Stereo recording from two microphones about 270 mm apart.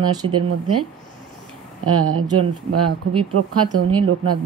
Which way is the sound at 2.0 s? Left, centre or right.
Right.